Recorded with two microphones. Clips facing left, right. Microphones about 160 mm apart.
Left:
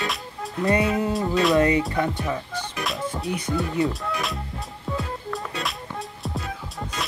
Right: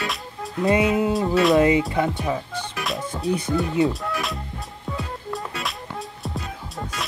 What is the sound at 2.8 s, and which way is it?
Music, centre (ahead or behind).